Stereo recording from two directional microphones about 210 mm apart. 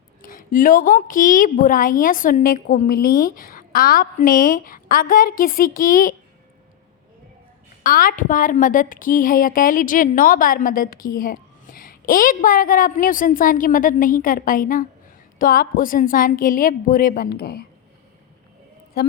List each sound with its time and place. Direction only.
0.3 s a woman's voice: 40° left (ahead or behind)
7.9 s a woman's voice: 40° left (ahead or behind)